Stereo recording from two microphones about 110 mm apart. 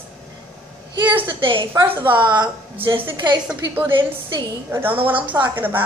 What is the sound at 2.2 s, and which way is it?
A woman's voice, 45° right (ahead or behind).